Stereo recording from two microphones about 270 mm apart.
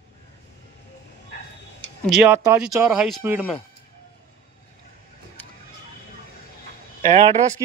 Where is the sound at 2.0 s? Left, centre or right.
Centre.